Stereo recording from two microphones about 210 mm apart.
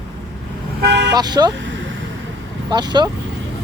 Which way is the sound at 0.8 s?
55° right (ahead or behind).